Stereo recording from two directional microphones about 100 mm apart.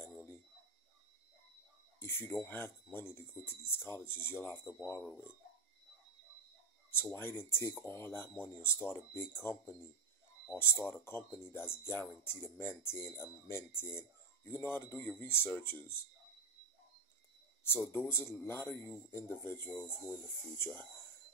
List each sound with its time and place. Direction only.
0.0 s a sound: 25° left (ahead or behind)
2.0 s speech: 25° left (ahead or behind)
6.9 s speech: 25° left (ahead or behind)
17.6 s speech: 25° left (ahead or behind)